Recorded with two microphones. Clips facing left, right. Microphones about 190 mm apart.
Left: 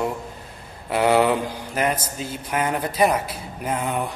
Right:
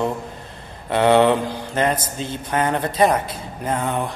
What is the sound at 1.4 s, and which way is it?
A man's voice, 10° left (ahead or behind).